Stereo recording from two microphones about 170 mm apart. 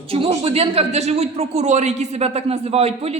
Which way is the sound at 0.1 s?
35° right (ahead or behind).